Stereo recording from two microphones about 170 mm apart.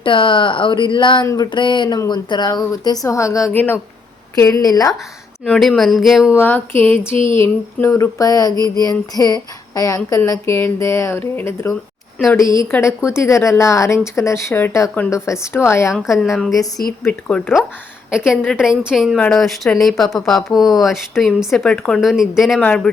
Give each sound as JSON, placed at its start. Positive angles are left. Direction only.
{"t": 0.0, "sound": "speech", "side_deg": 30}
{"t": 5.5, "sound": "speech", "side_deg": 0}
{"t": 6.3, "sound": "speech", "side_deg": 10}
{"t": 16.1, "sound": "speech", "side_deg": 0}
{"t": 18.8, "sound": "speech", "side_deg": -5}